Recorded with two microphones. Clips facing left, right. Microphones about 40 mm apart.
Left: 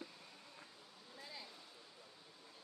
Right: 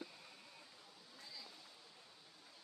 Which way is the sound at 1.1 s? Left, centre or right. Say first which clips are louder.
Left 3 dB; left.